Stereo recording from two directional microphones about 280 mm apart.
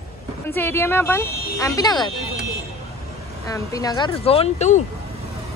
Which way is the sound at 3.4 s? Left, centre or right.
Centre.